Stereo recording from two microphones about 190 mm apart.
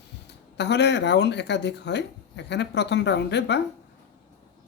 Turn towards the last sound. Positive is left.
turn(degrees=65)  # may be behind; listen again after turning